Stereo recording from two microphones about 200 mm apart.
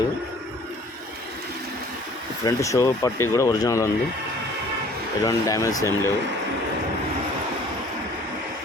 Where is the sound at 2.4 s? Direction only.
15° left (ahead or behind).